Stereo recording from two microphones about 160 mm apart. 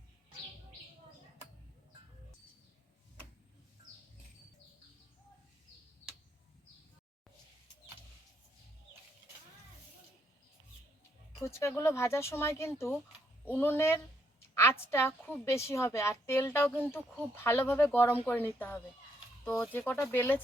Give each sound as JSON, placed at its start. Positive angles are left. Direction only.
{"t": 11.4, "sound": "a woman's voice", "side_deg": 15}
{"t": 19.9, "sound": "a woman's voice", "side_deg": 10}